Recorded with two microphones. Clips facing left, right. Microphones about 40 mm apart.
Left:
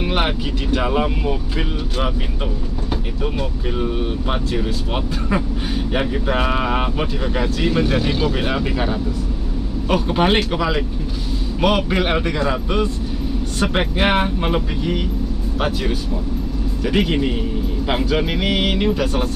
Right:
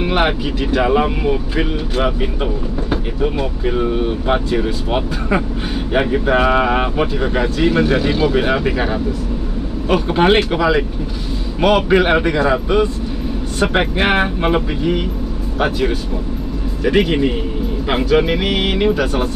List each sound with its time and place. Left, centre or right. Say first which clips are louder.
0.0 s vehicle: right 4 dB; centre
0.7 s speech: right 5 dB; centre
12.1 s speech: right 5 dB; centre